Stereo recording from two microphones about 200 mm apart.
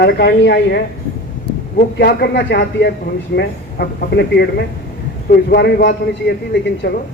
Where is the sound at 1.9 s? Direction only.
55° left (ahead or behind).